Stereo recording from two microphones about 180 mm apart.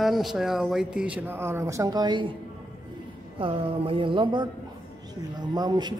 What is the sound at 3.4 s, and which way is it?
Speech, 30° right (ahead or behind).